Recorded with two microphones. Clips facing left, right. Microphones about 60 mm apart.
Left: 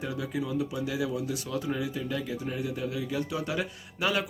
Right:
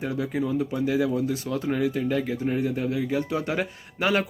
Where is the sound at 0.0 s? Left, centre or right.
Right.